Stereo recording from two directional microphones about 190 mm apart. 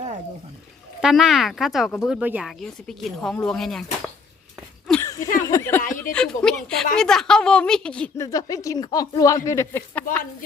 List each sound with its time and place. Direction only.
1.0 s speech: centre (ahead or behind)
4.9 s a sound: 15° left (ahead or behind)
5.5 s speech: 15° left (ahead or behind)
8.2 s speech: 20° left (ahead or behind)